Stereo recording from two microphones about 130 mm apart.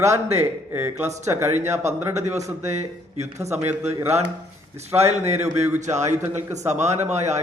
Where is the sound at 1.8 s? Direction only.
60° right (ahead or behind).